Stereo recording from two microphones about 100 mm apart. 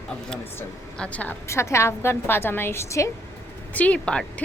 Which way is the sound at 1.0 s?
15° left (ahead or behind).